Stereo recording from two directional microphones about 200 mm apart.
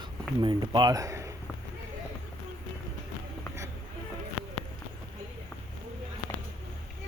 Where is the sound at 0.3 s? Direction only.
20° right (ahead or behind).